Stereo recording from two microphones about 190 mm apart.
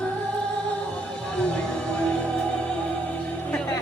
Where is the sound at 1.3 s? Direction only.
5° left (ahead or behind).